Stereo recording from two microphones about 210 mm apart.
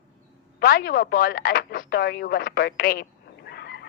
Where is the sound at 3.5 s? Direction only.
50° left (ahead or behind).